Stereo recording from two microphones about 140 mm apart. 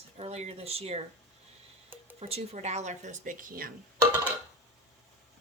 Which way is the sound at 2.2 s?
50° right (ahead or behind).